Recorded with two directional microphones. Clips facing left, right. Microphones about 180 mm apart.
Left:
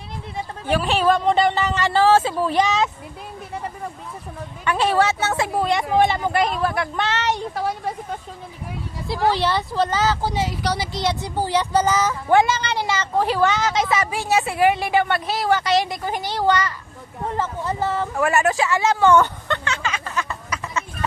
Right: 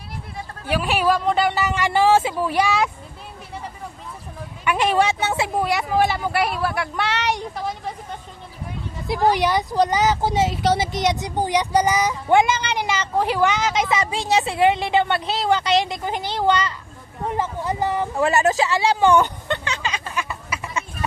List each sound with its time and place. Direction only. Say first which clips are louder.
0.7 s speech: left 1 dB; 10° right (ahead or behind)
4.6 s speech: even; 15° right (ahead or behind)
6.0 s speech: left 2 dB; 20° left (ahead or behind)
6.3 s speech: left 1 dB; 10° right (ahead or behind)
7.5 s a woman's voice: left 3 dB; 5° left (ahead or behind)
9.0 s speech: right 2 dB; 20° right (ahead or behind)
18.8 s a sound: left 2 dB; 15° right (ahead or behind)